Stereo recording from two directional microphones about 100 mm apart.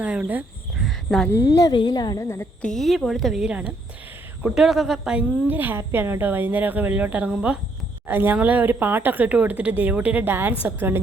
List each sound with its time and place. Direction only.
0.0 s speech: 10° right (ahead or behind)
0.8 s a sound: 5° left (ahead or behind)
1.3 s speech: 30° left (ahead or behind)
1.7 s a woman's voice: 45° left (ahead or behind)
2.2 s a woman's voice: 30° left (ahead or behind)
2.6 s a woman's voice: 5° left (ahead or behind)
5.5 s a woman's voice: 20° right (ahead or behind)